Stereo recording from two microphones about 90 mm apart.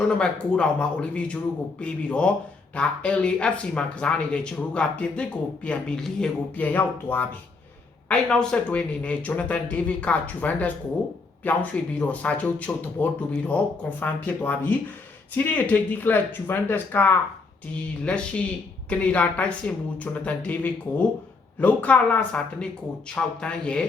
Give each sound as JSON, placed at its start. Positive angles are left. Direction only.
{"t": 0.1, "sound": "speech", "side_deg": 10}